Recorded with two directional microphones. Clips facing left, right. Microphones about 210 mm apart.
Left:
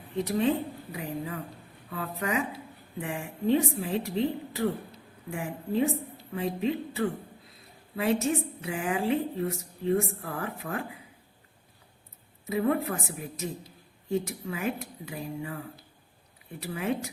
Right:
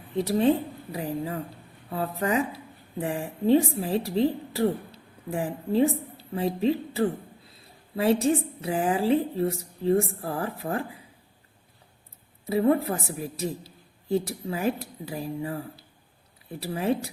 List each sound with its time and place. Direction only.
0.3 s a woman's voice: 35° right (ahead or behind)
12.5 s a woman's voice: 35° right (ahead or behind)